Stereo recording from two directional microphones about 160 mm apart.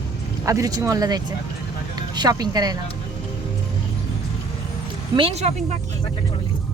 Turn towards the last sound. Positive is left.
turn(degrees=-45)  # may be behind; listen again after turning